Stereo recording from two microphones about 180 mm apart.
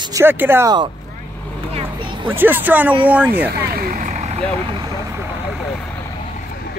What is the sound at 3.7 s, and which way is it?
Vehicle, 55° right (ahead or behind).